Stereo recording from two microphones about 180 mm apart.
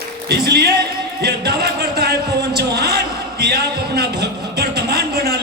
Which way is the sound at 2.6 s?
65° right (ahead or behind).